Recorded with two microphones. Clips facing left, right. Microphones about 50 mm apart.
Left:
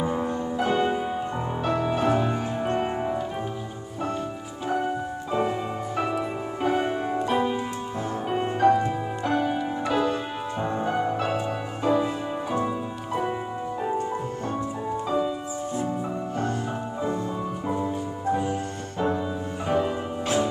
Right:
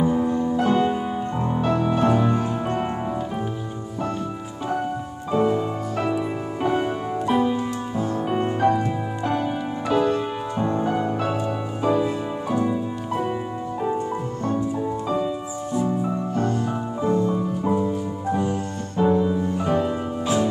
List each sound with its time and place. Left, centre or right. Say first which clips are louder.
0.0 s music: right 5 dB; left
0.4 s music: right 2 dB; centre
5.3 s music: right 6 dB; centre
15.0 s music: even; centre
16.3 s music: right 4 dB; left
17.6 s music: right 5 dB; centre